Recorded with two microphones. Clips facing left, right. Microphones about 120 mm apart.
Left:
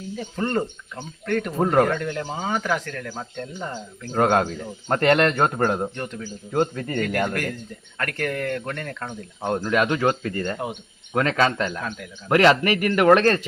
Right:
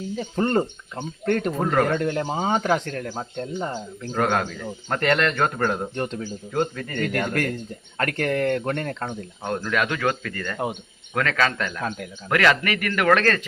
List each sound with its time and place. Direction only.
0.3 s speech: 35° right (ahead or behind)
1.5 s speech: 30° left (ahead or behind)
2.0 s speech: 30° right (ahead or behind)
4.1 s speech: 30° left (ahead or behind)
6.0 s speech: 30° right (ahead or behind)
6.5 s speech: 25° left (ahead or behind)
7.9 s speech: 25° right (ahead or behind)
9.4 s speech: 25° left (ahead or behind)
11.8 s speech: 45° right (ahead or behind)
12.3 s speech: 30° left (ahead or behind)